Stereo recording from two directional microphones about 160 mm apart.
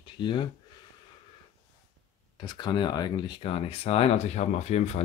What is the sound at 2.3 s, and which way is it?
Speech, 30° left (ahead or behind).